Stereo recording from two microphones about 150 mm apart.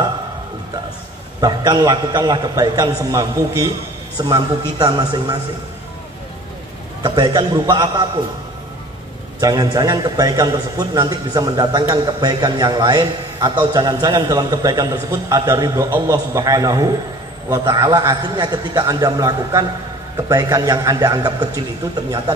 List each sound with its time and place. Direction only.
1.4 s a man's voice: 25° right (ahead or behind)
7.0 s a man's voice: 30° right (ahead or behind)
9.4 s a man's voice: 25° right (ahead or behind)